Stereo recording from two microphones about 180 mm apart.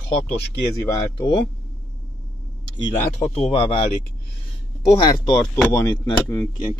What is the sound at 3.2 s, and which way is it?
Speech, 35° left (ahead or behind).